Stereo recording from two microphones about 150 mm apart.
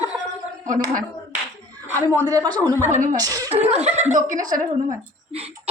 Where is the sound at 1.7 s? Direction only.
15° right (ahead or behind).